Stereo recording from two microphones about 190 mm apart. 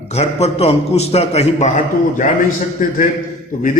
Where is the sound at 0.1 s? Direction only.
35° left (ahead or behind).